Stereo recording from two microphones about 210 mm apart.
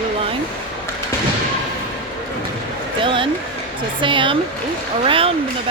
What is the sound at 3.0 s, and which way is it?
Speech, 25° right (ahead or behind).